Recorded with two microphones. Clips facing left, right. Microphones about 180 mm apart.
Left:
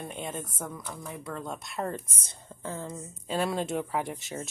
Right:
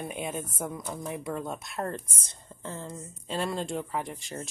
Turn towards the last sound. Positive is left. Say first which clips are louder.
# left 2 dB
turn(degrees=0)  # may be behind; listen again after turning